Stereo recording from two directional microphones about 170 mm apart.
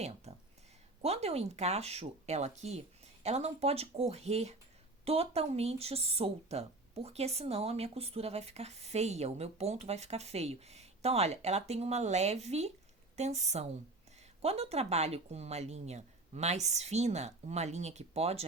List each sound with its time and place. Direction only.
0.3 s speech: 40° right (ahead or behind)